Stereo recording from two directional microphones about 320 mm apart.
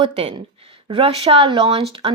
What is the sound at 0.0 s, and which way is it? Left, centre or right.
Speech, centre.